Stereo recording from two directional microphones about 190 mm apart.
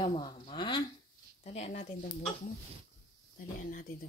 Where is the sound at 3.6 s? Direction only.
45° left (ahead or behind).